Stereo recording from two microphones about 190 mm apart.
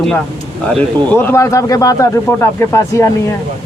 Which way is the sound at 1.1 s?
15° left (ahead or behind).